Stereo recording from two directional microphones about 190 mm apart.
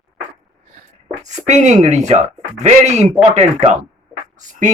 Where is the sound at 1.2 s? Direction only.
40° right (ahead or behind).